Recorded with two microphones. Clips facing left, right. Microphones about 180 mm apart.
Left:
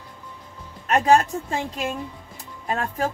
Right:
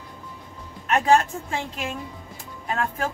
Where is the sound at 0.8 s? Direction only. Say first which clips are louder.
Left 1 dB; 40° left (ahead or behind).